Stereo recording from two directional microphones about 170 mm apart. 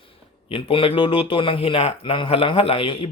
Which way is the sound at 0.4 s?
30° left (ahead or behind).